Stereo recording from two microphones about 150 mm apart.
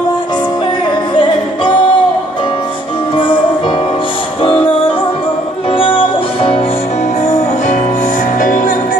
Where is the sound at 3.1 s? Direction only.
35° left (ahead or behind).